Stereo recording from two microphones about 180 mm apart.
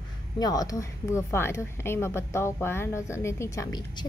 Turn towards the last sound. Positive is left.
turn(degrees=20)  # may be behind; listen again after turning